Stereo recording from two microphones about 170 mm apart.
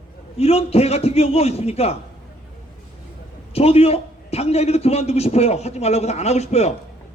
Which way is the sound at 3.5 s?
35° left (ahead or behind).